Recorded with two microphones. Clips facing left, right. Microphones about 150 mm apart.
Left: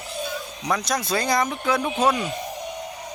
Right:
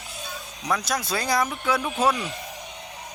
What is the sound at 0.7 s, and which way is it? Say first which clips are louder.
Speech: left 2 dB; 5° right (ahead or behind).